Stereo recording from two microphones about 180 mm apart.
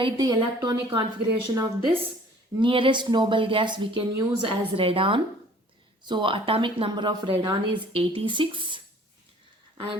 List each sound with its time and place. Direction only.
0.0 s speech: 20° right (ahead or behind)
1.5 s a woman's voice: 10° right (ahead or behind)
2.6 s speech: 30° right (ahead or behind)